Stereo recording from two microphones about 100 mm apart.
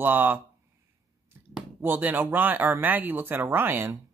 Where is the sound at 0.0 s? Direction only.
20° right (ahead or behind).